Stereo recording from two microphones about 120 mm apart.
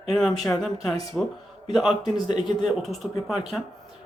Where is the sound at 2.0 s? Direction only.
40° left (ahead or behind).